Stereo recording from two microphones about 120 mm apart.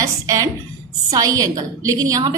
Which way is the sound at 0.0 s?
30° right (ahead or behind).